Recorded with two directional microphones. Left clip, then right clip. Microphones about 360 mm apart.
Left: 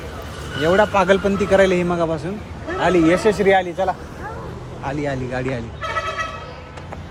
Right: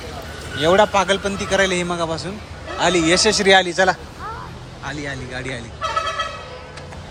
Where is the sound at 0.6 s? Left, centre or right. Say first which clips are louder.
Right 1 dB; centre.